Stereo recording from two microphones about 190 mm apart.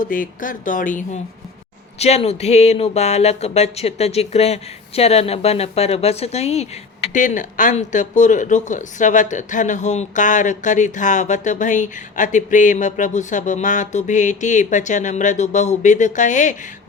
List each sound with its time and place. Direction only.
0.0 s speech: 45° left (ahead or behind)